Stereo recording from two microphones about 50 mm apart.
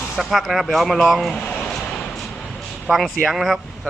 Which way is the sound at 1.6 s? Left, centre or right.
Centre.